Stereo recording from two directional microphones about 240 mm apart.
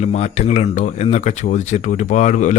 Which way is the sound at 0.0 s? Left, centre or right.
Left.